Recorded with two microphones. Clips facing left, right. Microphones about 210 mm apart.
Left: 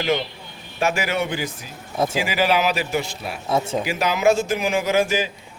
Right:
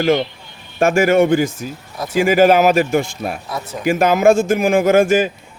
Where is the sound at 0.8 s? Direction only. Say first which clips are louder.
Right 10 dB; 50° right (ahead or behind).